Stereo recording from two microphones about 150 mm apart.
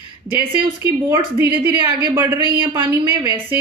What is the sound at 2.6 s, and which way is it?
Speech, 35° right (ahead or behind).